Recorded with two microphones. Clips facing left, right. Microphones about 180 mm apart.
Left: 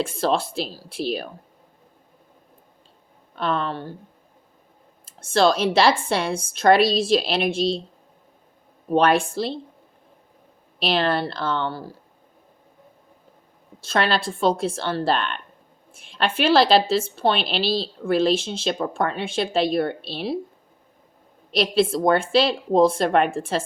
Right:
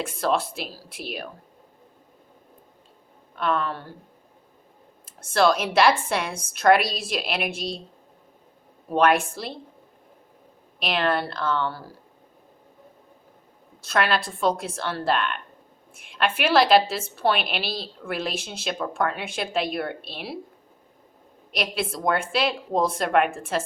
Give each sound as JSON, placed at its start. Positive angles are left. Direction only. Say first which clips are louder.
{"t": 0.0, "sound": "speech", "louder": "left 2 dB", "side_deg": 30}
{"t": 3.3, "sound": "speech", "louder": "left 1 dB", "side_deg": 30}
{"t": 5.0, "sound": "a woman's voice", "louder": "left 2 dB", "side_deg": 30}
{"t": 8.9, "sound": "a woman's voice", "louder": "left 2 dB", "side_deg": 30}
{"t": 10.8, "sound": "speech", "louder": "left 2 dB", "side_deg": 30}
{"t": 13.8, "sound": "a woman's voice", "louder": "left 2 dB", "side_deg": 30}
{"t": 21.5, "sound": "a woman's voice", "louder": "left 8 dB", "side_deg": 30}